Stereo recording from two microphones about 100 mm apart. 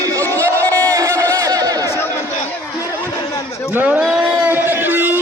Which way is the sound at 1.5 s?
40° right (ahead or behind).